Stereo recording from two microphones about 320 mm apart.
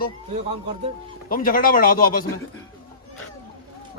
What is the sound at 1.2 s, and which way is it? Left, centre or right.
Speech, left.